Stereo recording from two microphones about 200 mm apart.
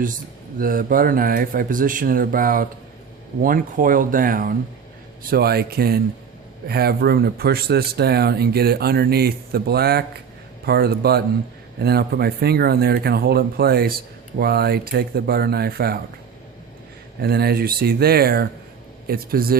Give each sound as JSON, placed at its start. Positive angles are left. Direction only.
{"t": 0.6, "sound": "speech", "side_deg": -45}
{"t": 17.2, "sound": "speech", "side_deg": -50}